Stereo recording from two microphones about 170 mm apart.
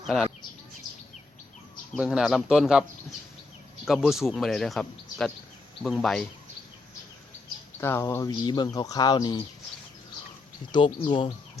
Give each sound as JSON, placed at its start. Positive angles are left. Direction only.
{"t": 0.0, "sound": "speech", "side_deg": 0}
{"t": 2.0, "sound": "a man's voice", "side_deg": 0}
{"t": 3.8, "sound": "a man's voice", "side_deg": 0}
{"t": 7.8, "sound": "speech", "side_deg": 15}
{"t": 10.7, "sound": "speech", "side_deg": 25}